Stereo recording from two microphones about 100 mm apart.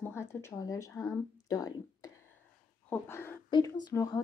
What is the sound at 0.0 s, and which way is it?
A woman's voice, 25° left (ahead or behind).